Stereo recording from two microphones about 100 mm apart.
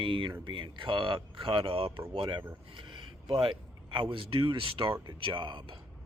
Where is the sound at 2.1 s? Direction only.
55° right (ahead or behind).